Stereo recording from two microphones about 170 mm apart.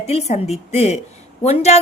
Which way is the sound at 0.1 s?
40° left (ahead or behind).